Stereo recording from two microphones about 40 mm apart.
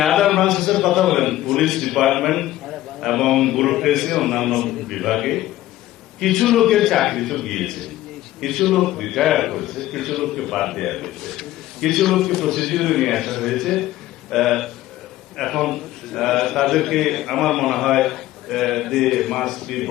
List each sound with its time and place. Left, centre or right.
0.0 s a man's voice: centre